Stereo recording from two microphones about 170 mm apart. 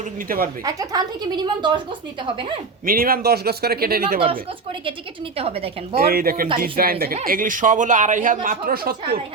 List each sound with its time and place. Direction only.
0.3 s speech: 55° right (ahead or behind)
0.6 s a woman's voice: 20° right (ahead or behind)
2.8 s speech: 60° right (ahead or behind)
5.4 s a woman's voice: 35° right (ahead or behind)
6.0 s speech: 60° right (ahead or behind)